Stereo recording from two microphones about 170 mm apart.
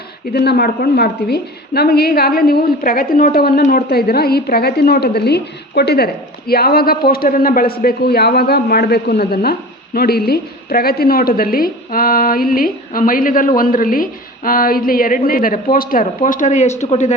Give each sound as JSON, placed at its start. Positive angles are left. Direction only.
{"t": 0.3, "sound": "a man's voice", "side_deg": 70}